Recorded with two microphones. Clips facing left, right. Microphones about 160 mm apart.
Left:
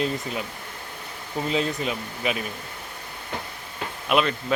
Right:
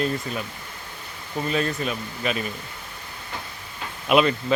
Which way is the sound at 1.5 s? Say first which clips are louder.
Even; 15° left (ahead or behind).